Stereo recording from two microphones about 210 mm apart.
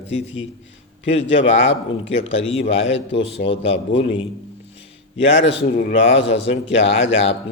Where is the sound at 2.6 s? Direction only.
30° left (ahead or behind).